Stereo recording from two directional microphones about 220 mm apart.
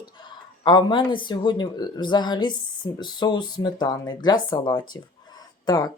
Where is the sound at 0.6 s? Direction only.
20° left (ahead or behind).